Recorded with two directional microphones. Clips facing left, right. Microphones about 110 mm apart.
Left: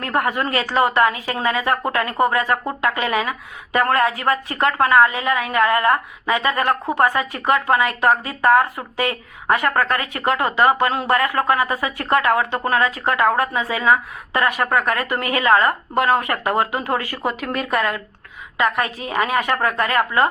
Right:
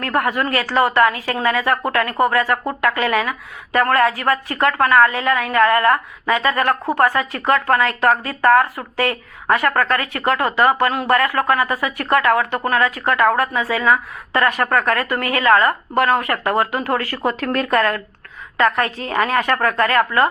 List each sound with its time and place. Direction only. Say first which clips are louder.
0.0 s a woman's voice: right 1 dB; 20° left (ahead or behind)